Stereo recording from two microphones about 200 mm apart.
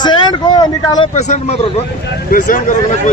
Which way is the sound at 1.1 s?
35° left (ahead or behind).